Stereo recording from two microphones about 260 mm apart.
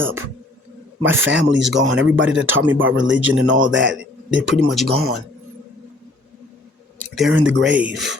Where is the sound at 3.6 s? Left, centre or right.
Right.